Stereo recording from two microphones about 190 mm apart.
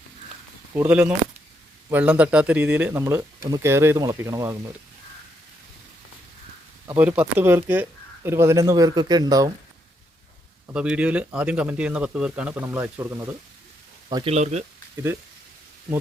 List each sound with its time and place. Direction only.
0.7 s speech: 10° right (ahead or behind)
6.9 s speech: 10° right (ahead or behind)
10.8 s speech: 5° right (ahead or behind); by 14.3 s 20° right (ahead or behind)
14.3 s speech: 35° right (ahead or behind)